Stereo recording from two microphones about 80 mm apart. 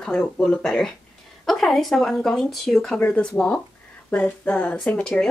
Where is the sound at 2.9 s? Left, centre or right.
Left.